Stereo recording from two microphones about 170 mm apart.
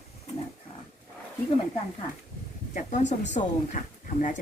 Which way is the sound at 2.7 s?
45° left (ahead or behind).